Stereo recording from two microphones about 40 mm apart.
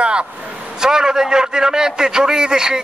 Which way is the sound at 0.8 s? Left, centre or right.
Centre.